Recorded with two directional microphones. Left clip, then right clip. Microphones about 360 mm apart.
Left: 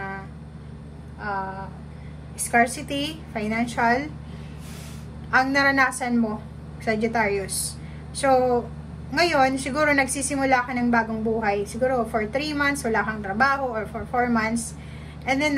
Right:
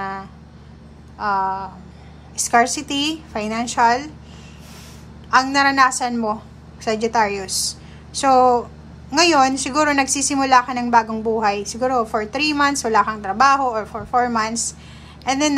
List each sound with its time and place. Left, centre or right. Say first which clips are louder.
1.2 s a woman's voice: right 9 dB; centre
5.3 s a woman's voice: right 4 dB; centre